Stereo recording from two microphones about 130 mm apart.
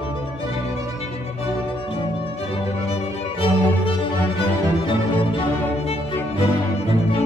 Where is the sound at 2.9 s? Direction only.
45° left (ahead or behind).